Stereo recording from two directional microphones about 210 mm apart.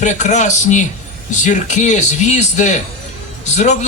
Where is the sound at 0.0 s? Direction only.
35° left (ahead or behind).